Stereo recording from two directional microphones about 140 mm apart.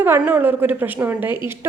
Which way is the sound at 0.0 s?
15° right (ahead or behind).